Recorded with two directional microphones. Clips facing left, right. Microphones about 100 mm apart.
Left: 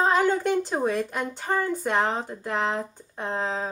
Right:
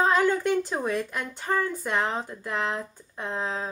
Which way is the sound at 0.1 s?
20° left (ahead or behind).